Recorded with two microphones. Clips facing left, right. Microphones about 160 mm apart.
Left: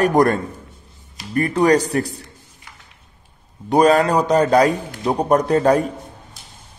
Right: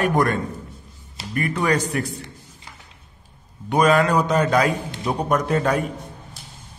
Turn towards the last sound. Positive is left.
turn(degrees=35)  # may be behind; listen again after turning